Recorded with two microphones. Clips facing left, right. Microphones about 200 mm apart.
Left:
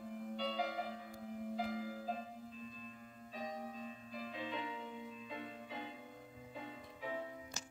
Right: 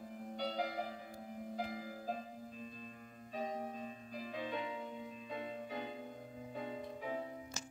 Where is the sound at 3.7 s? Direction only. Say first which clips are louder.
Right 2 dB; 45° right (ahead or behind).